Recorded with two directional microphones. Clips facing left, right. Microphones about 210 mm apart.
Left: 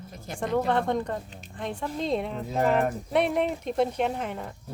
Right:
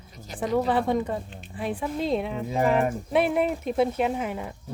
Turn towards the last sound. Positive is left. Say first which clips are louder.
# right 2 dB
turn(degrees=-5)  # may be behind; listen again after turning